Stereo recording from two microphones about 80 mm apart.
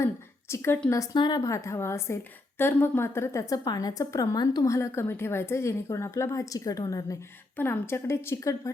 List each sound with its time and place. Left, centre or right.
0.0 s a sound: left
1.1 s a woman's voice: left
1.4 s a woman's voice: left
3.5 s a woman's voice: left
7.5 s a woman's voice: left